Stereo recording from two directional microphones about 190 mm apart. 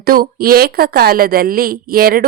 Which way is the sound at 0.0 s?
50° right (ahead or behind).